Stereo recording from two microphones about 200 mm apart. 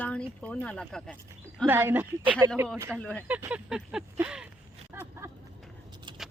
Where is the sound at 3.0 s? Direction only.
5° left (ahead or behind).